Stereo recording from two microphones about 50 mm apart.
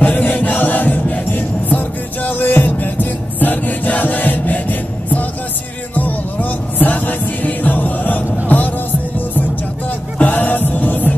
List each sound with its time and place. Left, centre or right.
0.0 s music: left
6.8 s music: left
10.1 s music: left